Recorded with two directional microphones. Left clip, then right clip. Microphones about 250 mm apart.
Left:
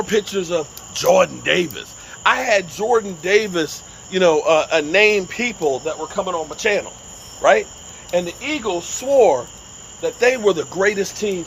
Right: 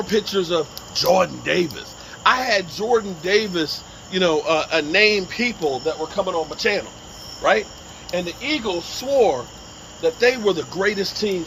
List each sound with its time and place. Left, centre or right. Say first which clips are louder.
0.1 s speech: right 1 dB; centre